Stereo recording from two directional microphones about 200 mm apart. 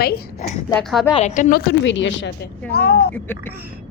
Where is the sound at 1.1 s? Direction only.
35° left (ahead or behind); by 2.3 s 65° left (ahead or behind).